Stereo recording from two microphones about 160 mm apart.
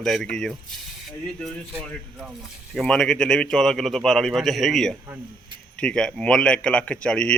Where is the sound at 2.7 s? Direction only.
5° left (ahead or behind).